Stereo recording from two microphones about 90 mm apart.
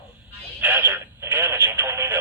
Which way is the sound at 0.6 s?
20° right (ahead or behind).